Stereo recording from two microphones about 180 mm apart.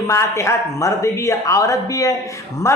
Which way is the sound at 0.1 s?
15° left (ahead or behind).